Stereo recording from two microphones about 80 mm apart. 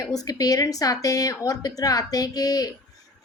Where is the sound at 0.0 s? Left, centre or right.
Left.